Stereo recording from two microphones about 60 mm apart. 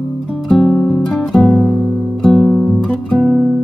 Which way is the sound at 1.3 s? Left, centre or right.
Centre.